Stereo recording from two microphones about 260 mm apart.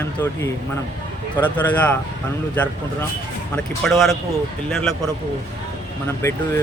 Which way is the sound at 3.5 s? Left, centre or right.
Centre.